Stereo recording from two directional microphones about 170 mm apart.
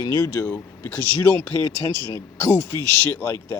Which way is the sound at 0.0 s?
20° left (ahead or behind).